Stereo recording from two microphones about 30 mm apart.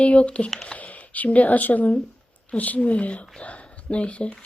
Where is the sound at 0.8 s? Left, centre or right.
Left.